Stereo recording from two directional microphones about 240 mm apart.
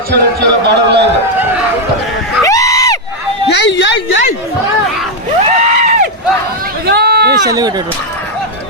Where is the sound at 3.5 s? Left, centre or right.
Left.